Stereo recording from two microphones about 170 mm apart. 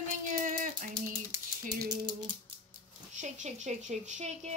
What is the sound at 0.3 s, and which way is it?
Rattle, 50° right (ahead or behind).